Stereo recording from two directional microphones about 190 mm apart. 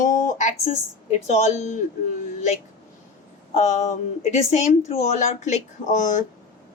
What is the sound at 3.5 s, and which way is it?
A woman's voice, 35° left (ahead or behind).